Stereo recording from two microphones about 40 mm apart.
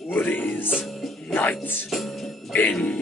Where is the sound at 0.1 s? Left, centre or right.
Left.